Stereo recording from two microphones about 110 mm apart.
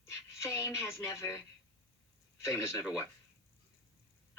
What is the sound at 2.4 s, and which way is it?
Speech, 25° left (ahead or behind).